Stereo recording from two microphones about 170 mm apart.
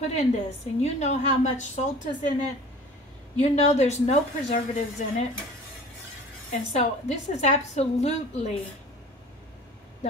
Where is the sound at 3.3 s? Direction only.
40° left (ahead or behind).